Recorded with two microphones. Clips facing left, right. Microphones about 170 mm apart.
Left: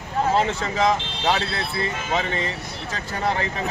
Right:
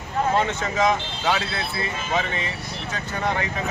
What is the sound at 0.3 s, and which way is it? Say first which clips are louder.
Speech: left 1 dB; 30° left (ahead or behind).